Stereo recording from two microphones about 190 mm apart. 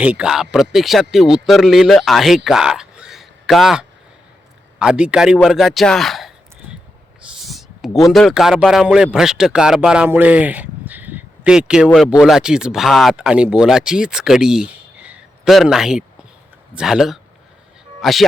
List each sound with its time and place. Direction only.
0.0 s speech: 5° right (ahead or behind)
7.3 s a sound: centre (ahead or behind)
8.1 s speech: centre (ahead or behind)